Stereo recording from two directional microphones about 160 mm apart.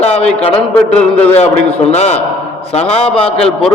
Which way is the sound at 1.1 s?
10° left (ahead or behind).